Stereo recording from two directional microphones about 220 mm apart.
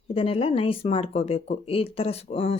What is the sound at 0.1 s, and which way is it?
Speech, 25° left (ahead or behind).